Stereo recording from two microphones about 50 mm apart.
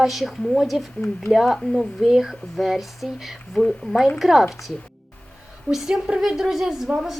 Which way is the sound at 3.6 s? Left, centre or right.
Centre.